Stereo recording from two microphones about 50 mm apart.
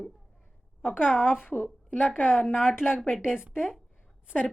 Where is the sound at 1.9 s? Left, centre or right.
Left.